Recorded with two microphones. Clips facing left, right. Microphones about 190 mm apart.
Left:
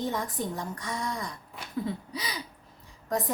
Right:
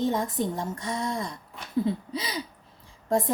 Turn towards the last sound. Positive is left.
turn(degrees=-25)  # may be behind; listen again after turning